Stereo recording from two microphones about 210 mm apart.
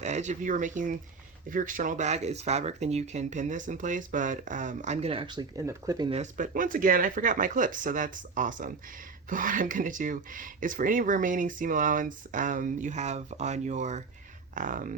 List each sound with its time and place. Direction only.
0.0 s speech: 35° right (ahead or behind); by 6.1 s 15° right (ahead or behind)
6.1 s speech: 35° right (ahead or behind)